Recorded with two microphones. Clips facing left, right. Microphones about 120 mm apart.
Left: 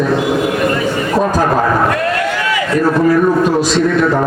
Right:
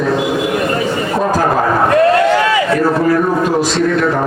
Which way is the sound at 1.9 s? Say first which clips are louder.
Right 6 dB; 30° right (ahead or behind).